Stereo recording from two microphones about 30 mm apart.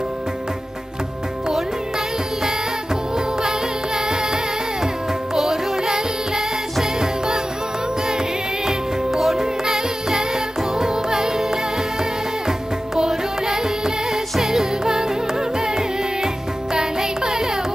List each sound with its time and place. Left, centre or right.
2.4 s music: centre
5.4 s music: centre
9.1 s music: centre
13.0 s music: centre